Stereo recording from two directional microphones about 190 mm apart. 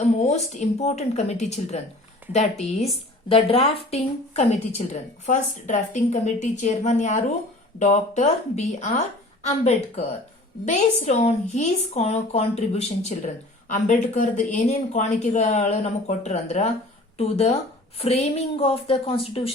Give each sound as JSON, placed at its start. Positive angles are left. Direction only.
{"t": 0.2, "sound": "a woman's voice", "side_deg": 35}